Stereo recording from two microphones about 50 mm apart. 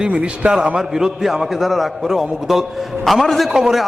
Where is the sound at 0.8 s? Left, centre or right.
Centre.